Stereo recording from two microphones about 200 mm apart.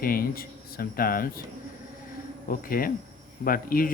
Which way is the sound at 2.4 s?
45° left (ahead or behind).